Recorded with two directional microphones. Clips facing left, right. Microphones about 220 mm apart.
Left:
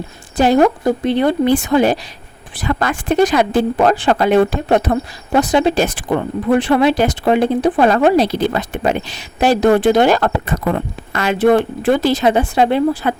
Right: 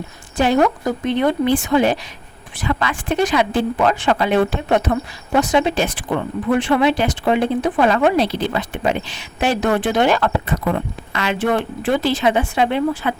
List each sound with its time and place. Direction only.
0.3 s speech: 40° left (ahead or behind)